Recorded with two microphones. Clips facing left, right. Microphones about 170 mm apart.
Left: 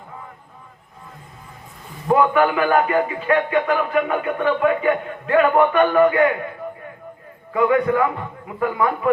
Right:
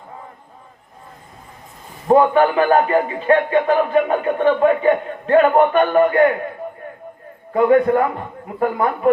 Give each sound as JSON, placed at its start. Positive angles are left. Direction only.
{"t": 2.0, "sound": "a man's voice", "side_deg": -30}
{"t": 7.5, "sound": "a man's voice", "side_deg": -40}